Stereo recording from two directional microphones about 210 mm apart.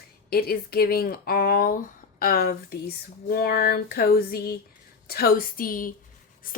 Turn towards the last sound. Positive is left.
turn(degrees=40)  # may be behind; listen again after turning